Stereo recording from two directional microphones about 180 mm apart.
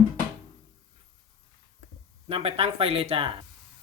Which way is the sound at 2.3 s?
30° right (ahead or behind).